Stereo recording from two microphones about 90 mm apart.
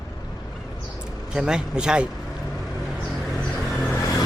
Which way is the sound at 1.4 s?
10° right (ahead or behind).